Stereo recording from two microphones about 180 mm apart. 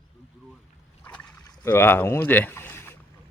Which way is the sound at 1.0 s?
10° left (ahead or behind).